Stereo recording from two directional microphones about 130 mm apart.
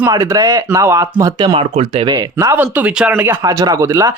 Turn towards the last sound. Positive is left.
turn(degrees=-25)  # may be behind; listen again after turning